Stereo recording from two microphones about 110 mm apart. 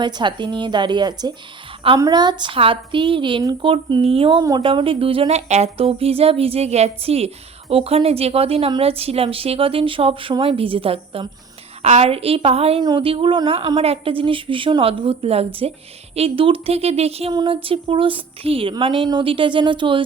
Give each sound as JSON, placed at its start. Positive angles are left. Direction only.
{"t": 0.0, "sound": "a woman's voice", "side_deg": -45}
{"t": 4.4, "sound": "a woman's voice", "side_deg": -35}
{"t": 4.6, "sound": "speech", "side_deg": -55}
{"t": 5.5, "sound": "speech", "side_deg": -80}
{"t": 11.8, "sound": "speech", "side_deg": -70}
{"t": 12.8, "sound": "a woman's voice", "side_deg": -45}
{"t": 13.8, "sound": "speech", "side_deg": -60}
{"t": 17.3, "sound": "a woman's voice", "side_deg": -50}